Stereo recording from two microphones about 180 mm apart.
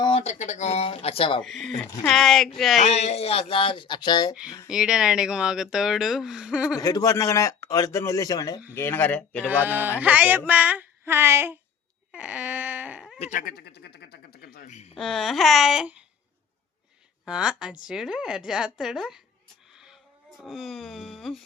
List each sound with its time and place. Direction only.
0.0 s speech: 35° left (ahead or behind)
1.4 s speech: centre (ahead or behind)
1.8 s speech: 20° left (ahead or behind)
2.0 s speech: centre (ahead or behind)
2.8 s speech: 35° left (ahead or behind)
4.7 s speech: 5° right (ahead or behind)
6.7 s speech: 20° left (ahead or behind)
9.5 s mantra: 10° right (ahead or behind)
12.1 s a sound: 5° right (ahead or behind)
13.1 s speech: 35° left (ahead or behind)
13.4 s a sound: 60° left (ahead or behind)
14.7 s a sound: 40° left (ahead or behind)
14.9 s speech: centre (ahead or behind)
17.2 s speech: 5° right (ahead or behind)